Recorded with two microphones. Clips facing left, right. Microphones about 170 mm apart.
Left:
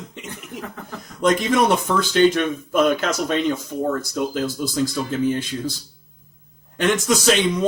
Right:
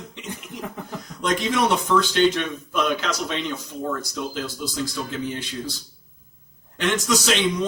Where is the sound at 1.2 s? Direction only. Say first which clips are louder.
Left 5 dB; 50° left (ahead or behind).